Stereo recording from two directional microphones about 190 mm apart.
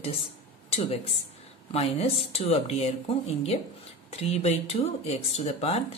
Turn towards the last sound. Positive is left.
turn(degrees=35)  # may be behind; listen again after turning